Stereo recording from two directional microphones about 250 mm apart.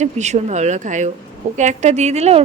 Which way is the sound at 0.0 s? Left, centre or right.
Right.